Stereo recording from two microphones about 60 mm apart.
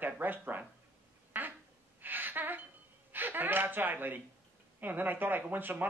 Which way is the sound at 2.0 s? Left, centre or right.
Right.